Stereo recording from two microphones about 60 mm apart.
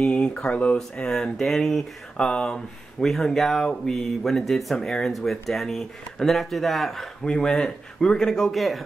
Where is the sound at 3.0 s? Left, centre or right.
Centre.